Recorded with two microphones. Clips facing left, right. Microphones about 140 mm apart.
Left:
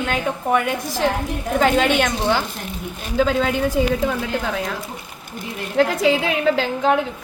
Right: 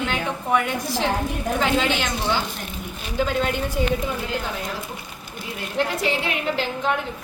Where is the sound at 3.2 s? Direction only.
90° left.